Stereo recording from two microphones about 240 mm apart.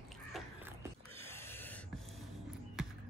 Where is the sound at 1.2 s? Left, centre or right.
Centre.